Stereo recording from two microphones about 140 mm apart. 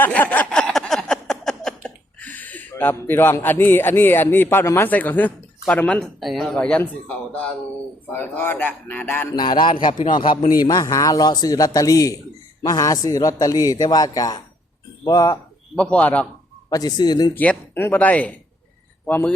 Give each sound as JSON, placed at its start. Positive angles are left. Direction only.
{"t": 0.0, "sound": "a sound", "side_deg": 10}
{"t": 8.1, "sound": "speech", "side_deg": 15}
{"t": 9.3, "sound": "a man's voice", "side_deg": 35}
{"t": 15.7, "sound": "speech", "side_deg": 10}
{"t": 16.6, "sound": "a man's voice", "side_deg": 25}
{"t": 17.3, "sound": "speech", "side_deg": 10}